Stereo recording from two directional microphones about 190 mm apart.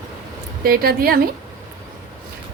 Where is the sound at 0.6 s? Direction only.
50° right (ahead or behind).